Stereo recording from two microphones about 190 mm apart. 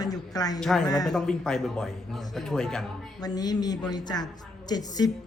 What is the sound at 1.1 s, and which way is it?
A man's voice, 5° left (ahead or behind).